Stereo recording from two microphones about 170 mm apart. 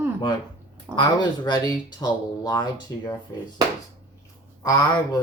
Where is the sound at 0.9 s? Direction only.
25° left (ahead or behind).